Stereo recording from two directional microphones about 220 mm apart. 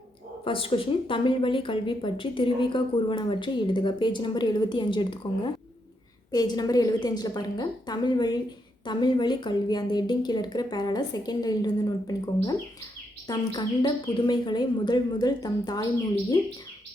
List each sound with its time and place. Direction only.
0.4 s speech: 25° left (ahead or behind)
6.3 s a woman's voice: 15° left (ahead or behind)